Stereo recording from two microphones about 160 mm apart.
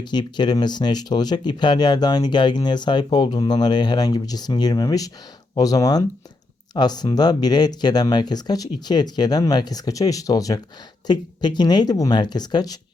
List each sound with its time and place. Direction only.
0.0 s speech: 30° left (ahead or behind)